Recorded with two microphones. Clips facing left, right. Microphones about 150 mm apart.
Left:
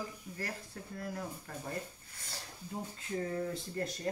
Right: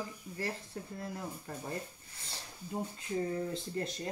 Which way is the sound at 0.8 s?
20° right (ahead or behind).